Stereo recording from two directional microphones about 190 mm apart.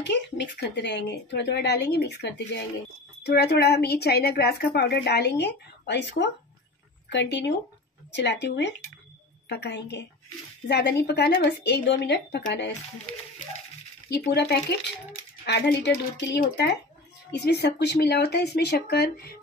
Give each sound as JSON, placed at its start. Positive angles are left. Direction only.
{"t": 0.0, "sound": "a woman's voice", "side_deg": 65}
{"t": 14.0, "sound": "a woman's voice", "side_deg": 60}